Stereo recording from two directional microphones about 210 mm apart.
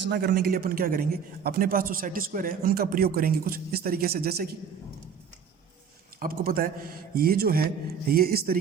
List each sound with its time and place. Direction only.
0.0 s a man's voice: 50° right (ahead or behind)
6.1 s a man's voice: 45° right (ahead or behind)